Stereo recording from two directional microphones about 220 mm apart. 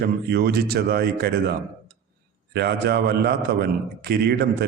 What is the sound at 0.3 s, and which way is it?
A man's voice, 45° right (ahead or behind).